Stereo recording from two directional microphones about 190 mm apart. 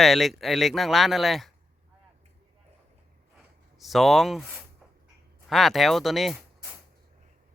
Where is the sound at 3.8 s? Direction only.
Centre (ahead or behind).